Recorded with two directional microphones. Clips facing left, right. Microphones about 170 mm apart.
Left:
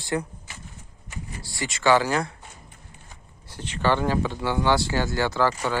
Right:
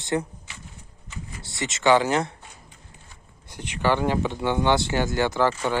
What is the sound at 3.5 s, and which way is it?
Speech, 15° right (ahead or behind).